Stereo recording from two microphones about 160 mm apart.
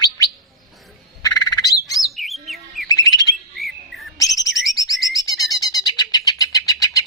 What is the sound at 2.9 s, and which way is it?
Bird, 20° left (ahead or behind).